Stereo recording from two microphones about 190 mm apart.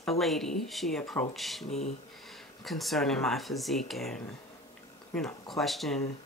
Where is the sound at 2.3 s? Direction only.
Centre (ahead or behind).